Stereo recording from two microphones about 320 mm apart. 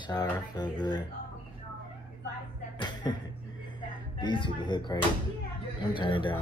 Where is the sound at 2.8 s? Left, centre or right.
Centre.